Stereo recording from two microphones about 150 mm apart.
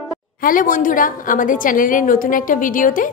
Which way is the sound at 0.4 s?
65° left (ahead or behind).